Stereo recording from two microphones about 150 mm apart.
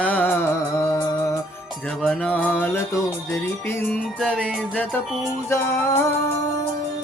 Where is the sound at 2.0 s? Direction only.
5° left (ahead or behind).